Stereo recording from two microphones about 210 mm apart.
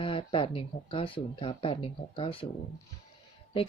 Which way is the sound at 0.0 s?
25° left (ahead or behind).